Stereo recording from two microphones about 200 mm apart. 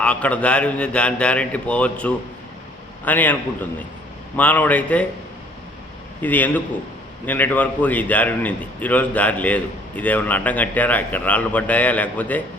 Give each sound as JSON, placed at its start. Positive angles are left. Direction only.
{"t": 0.0, "sound": "a man's voice", "side_deg": 5}
{"t": 4.4, "sound": "a man's voice", "side_deg": 10}
{"t": 6.2, "sound": "a man's voice", "side_deg": 10}